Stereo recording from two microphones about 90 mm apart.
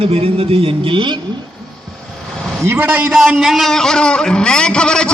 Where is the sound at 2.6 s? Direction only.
25° right (ahead or behind).